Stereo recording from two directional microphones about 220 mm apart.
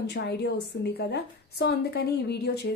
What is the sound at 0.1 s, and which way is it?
A woman's voice, 50° left (ahead or behind).